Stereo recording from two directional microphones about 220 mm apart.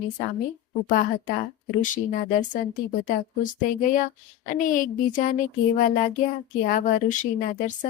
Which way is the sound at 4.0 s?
35° left (ahead or behind).